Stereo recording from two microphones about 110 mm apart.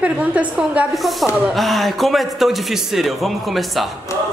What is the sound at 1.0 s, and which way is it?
A man's voice, centre (ahead or behind).